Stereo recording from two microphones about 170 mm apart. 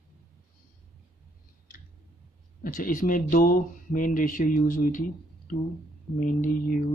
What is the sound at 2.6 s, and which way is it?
Speech, 55° left (ahead or behind).